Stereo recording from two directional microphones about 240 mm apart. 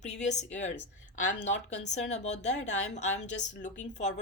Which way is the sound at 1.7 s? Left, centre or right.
Left.